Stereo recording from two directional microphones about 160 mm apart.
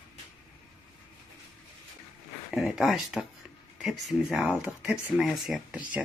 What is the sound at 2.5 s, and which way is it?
Speech, centre (ahead or behind).